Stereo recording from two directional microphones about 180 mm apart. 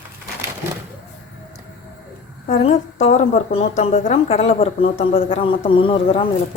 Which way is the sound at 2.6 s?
40° left (ahead or behind).